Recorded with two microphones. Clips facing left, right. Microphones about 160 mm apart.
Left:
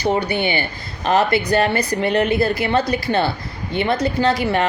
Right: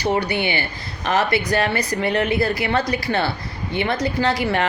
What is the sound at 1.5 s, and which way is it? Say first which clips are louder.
Speech: left 3 dB; 25° left (ahead or behind).